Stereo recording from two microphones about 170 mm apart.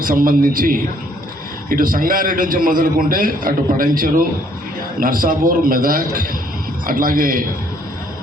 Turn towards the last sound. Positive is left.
turn(degrees=-55)  # may be behind; listen again after turning